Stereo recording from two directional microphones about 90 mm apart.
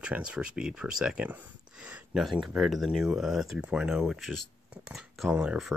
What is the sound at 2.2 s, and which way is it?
Speech, centre (ahead or behind).